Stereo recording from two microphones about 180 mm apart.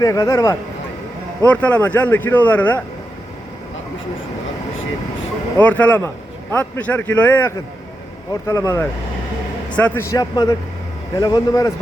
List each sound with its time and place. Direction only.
0.0 s speech: 20° left (ahead or behind)
1.5 s speech: 10° left (ahead or behind)
5.6 s speech: 10° left (ahead or behind)